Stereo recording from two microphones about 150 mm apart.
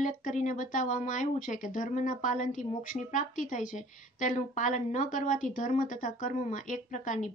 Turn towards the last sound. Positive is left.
turn(degrees=55)  # may be behind; listen again after turning